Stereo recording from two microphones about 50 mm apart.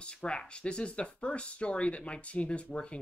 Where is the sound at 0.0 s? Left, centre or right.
Left.